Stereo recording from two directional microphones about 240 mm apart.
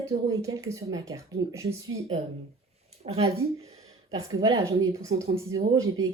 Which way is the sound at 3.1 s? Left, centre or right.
Right.